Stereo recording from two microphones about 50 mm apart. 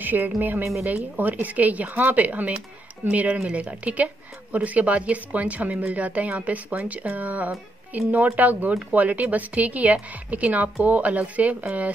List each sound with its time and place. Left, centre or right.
0.0 s a woman's voice: right